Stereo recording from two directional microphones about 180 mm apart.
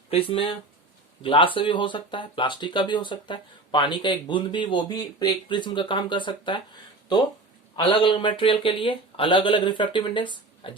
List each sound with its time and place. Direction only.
0.1 s speech: 30° left (ahead or behind)
7.8 s speech: 25° left (ahead or behind)